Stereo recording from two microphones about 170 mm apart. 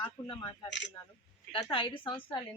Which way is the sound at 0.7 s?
90° left.